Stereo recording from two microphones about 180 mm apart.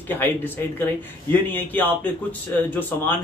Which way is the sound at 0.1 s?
10° left (ahead or behind).